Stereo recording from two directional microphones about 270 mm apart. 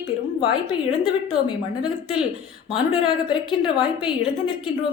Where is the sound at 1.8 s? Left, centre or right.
Centre.